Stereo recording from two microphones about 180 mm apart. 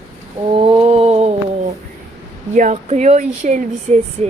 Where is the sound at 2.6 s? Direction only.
45° right (ahead or behind).